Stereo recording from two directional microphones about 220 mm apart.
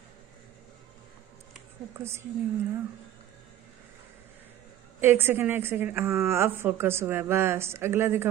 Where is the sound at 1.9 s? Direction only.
10° right (ahead or behind).